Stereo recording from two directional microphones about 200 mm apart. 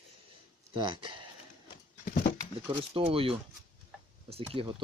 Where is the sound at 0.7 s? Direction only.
25° right (ahead or behind).